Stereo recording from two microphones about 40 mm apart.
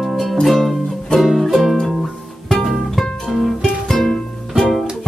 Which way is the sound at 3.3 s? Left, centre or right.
Centre.